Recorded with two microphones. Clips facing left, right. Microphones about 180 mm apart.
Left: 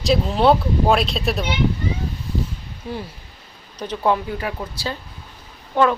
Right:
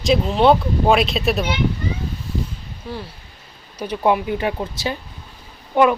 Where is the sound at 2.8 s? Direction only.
15° left (ahead or behind).